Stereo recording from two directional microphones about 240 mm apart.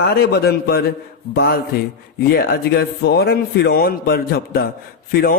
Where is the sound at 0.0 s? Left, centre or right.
Left.